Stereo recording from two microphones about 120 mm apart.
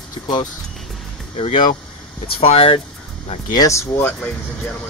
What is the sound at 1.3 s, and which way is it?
Speech, 50° left (ahead or behind).